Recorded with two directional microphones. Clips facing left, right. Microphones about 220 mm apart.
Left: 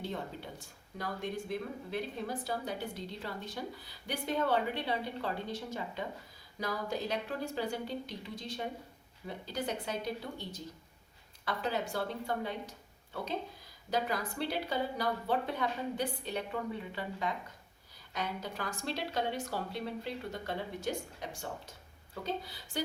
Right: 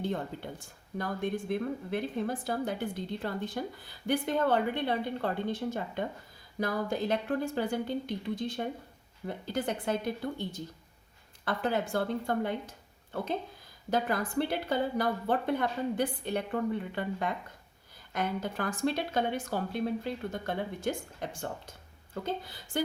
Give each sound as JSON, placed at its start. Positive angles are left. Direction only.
{"t": 0.6, "sound": "a woman's voice", "side_deg": -50}
{"t": 13.9, "sound": "a woman's voice", "side_deg": -50}